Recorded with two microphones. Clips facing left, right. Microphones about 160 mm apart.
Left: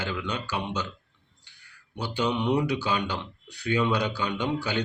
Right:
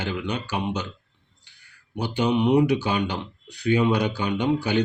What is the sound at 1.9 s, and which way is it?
A man's voice, 15° right (ahead or behind).